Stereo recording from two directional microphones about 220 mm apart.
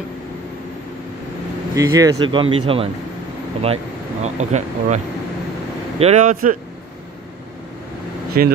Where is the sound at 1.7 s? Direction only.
15° right (ahead or behind).